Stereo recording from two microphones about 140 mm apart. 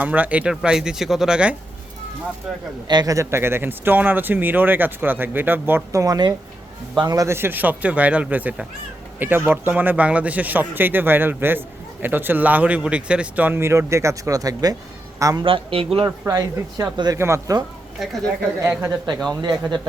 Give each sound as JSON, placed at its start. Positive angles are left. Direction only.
{"t": 0.0, "sound": "speech", "side_deg": -10}
{"t": 2.8, "sound": "speech", "side_deg": -30}
{"t": 15.4, "sound": "speech", "side_deg": -40}
{"t": 16.0, "sound": "speech", "side_deg": -25}
{"t": 18.8, "sound": "speech", "side_deg": -30}